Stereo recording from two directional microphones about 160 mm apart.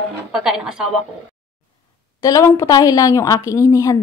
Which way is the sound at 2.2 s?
20° left (ahead or behind).